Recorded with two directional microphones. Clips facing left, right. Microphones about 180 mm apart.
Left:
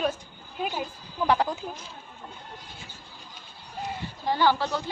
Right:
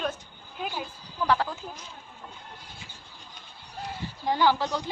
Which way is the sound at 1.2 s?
20° left (ahead or behind).